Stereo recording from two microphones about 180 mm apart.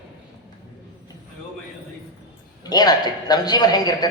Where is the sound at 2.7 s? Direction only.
20° left (ahead or behind).